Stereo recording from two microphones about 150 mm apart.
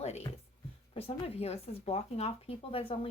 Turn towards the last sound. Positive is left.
turn(degrees=40)  # may be behind; listen again after turning